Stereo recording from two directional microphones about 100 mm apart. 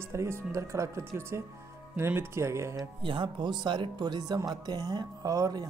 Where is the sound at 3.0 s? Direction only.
55° right (ahead or behind).